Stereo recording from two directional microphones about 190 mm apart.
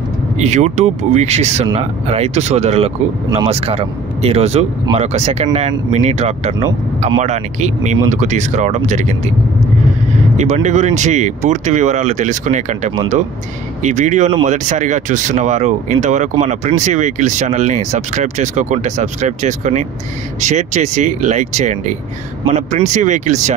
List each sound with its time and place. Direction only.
0.4 s speech: 35° right (ahead or behind)
10.3 s speech: 40° right (ahead or behind)